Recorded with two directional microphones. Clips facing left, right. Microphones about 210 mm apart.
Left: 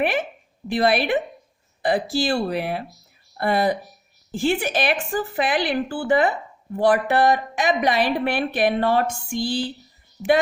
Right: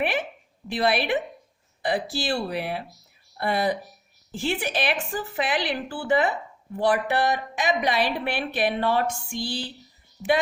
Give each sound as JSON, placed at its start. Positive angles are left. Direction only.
{"t": 0.0, "sound": "a woman's voice", "side_deg": 45}
{"t": 10.2, "sound": "speech", "side_deg": 10}